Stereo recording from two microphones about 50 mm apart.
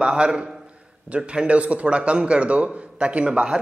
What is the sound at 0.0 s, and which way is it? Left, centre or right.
A man's voice, centre.